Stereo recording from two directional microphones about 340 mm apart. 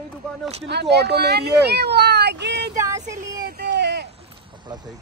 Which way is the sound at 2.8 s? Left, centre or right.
Centre.